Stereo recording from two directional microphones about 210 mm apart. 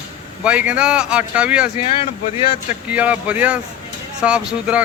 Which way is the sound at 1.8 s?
30° left (ahead or behind).